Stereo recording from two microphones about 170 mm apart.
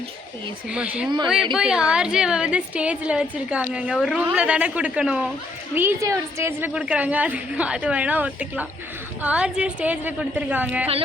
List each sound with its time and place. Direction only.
0.7 s a woman's voice: 5° right (ahead or behind)